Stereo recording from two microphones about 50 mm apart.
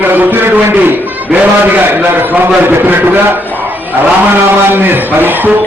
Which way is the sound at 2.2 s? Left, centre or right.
Right.